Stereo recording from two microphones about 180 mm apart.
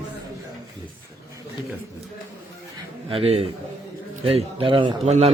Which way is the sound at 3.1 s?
30° right (ahead or behind).